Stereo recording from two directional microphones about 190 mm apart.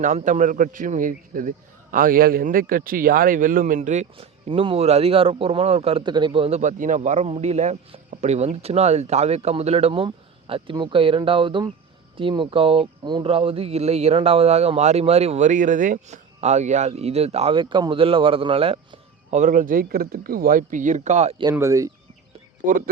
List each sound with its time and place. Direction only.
0.0 s a man's voice: 40° right (ahead or behind)
21.5 s speech: 15° right (ahead or behind)